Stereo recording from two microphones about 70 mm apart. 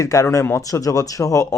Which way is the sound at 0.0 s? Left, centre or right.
Left.